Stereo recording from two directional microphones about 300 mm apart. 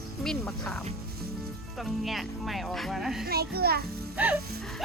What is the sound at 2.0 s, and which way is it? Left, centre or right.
Speech, centre.